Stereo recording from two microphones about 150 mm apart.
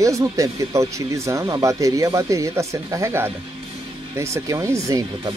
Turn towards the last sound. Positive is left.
turn(degrees=-25)  # may be behind; listen again after turning